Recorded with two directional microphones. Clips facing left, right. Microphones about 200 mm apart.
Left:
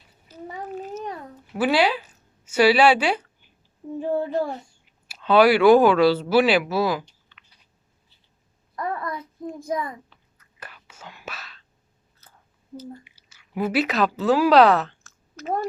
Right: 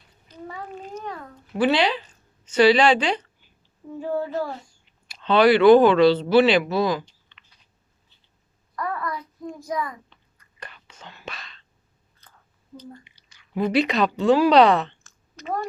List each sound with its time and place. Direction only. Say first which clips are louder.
0.3 s a sound: left 3 dB; 5° left (ahead or behind)
1.5 s speech: even; 5° left (ahead or behind)
4.0 s a child's voice: left 2 dB; 20° left (ahead or behind)
4.9 s speech: left 1 dB; 5° left (ahead or behind)
7.3 s chewing: left 1 dB; 5° left (ahead or behind)
8.7 s babbling: even; 25° left (ahead or behind)
9.6 s a child's voice: left 1 dB; 25° left (ahead or behind)
10.1 s whispering: even; 5° left (ahead or behind)
12.2 s chewing: even; 5° left (ahead or behind)
12.8 s speech: left 4 dB; 5° left (ahead or behind)